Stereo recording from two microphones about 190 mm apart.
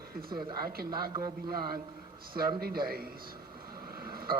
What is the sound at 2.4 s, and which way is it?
Speech, 50° right (ahead or behind).